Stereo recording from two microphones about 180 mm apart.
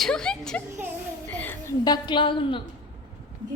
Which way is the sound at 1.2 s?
10° left (ahead or behind).